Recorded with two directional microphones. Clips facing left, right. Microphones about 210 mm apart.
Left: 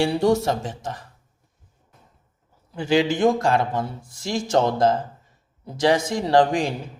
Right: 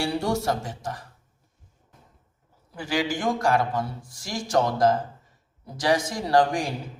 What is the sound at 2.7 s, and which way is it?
A man's voice, 25° left (ahead or behind).